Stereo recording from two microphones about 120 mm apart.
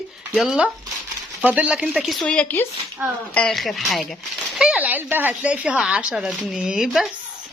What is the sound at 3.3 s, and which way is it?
Speech, 5° left (ahead or behind).